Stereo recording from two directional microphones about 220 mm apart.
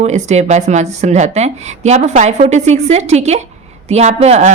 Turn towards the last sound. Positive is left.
turn(degrees=-30)  # may be behind; listen again after turning